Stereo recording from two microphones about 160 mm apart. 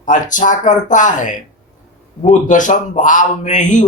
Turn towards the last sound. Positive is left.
turn(degrees=50)  # may be behind; listen again after turning